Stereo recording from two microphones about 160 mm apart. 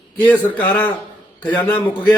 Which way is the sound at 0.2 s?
10° left (ahead or behind).